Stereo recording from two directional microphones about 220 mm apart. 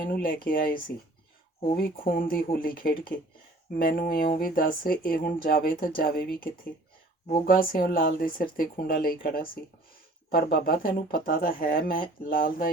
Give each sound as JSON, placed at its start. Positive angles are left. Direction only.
{"t": 0.1, "sound": "speech", "side_deg": 40}